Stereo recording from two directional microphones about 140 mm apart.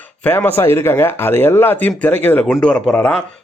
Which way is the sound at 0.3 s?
15° left (ahead or behind).